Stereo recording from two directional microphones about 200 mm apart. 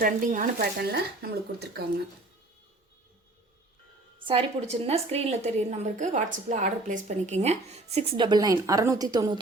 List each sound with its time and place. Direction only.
0.0 s speech: 40° right (ahead or behind)
4.3 s a woman's voice: 30° right (ahead or behind)